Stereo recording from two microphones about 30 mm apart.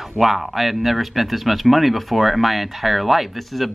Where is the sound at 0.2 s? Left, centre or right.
Centre.